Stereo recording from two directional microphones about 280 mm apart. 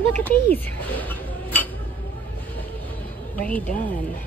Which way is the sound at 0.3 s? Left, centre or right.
Centre.